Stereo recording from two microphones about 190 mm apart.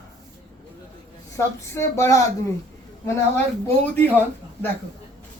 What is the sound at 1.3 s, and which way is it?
Speech, 15° left (ahead or behind).